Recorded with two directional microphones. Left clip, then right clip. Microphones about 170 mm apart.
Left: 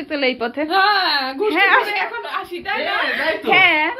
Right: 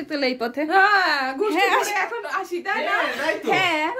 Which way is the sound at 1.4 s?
15° right (ahead or behind).